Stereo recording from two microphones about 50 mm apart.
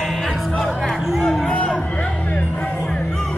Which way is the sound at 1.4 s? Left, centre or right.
Left.